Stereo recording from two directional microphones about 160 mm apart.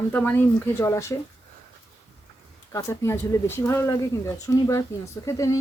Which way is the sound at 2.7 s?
20° left (ahead or behind).